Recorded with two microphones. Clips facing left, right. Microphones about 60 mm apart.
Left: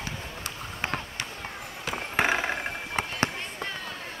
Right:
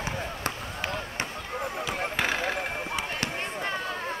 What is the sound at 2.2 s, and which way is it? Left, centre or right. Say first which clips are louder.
Basketball bounce: left 5 dB; left.